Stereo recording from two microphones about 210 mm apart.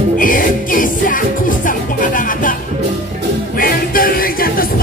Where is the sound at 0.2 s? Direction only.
40° left (ahead or behind).